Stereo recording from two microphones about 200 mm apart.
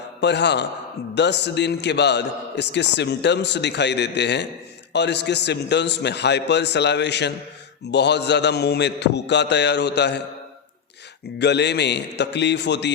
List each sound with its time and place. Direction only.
0.2 s a man's voice: 60° left (ahead or behind)
11.3 s a man's voice: 60° left (ahead or behind)